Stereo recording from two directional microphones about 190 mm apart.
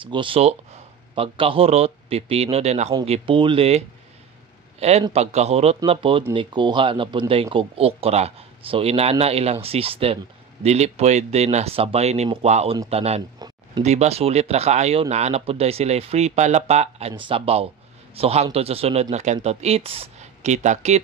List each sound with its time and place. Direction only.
0.0 s a man's voice: 25° right (ahead or behind)